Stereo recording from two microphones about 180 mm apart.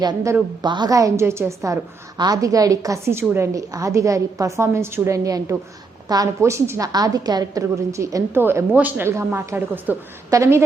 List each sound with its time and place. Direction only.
0.0 s a woman's voice: 20° right (ahead or behind)